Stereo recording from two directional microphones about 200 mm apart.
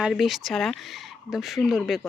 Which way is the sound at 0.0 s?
Centre (ahead or behind).